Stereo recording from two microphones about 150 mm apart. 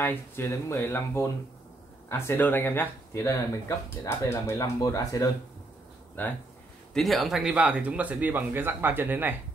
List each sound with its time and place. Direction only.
0.0 s speech: 15° left (ahead or behind)
6.2 s speech: 10° left (ahead or behind)
6.9 s speech: centre (ahead or behind)